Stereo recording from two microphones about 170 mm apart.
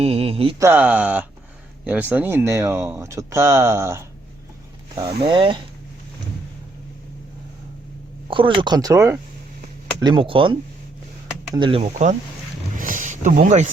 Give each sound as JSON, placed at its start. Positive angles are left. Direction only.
{"t": 0.0, "sound": "mantra", "side_deg": -35}
{"t": 0.6, "sound": "speech", "side_deg": -10}
{"t": 4.9, "sound": "speech", "side_deg": -30}
{"t": 8.3, "sound": "speech", "side_deg": -30}
{"t": 12.7, "sound": "a sound", "side_deg": -50}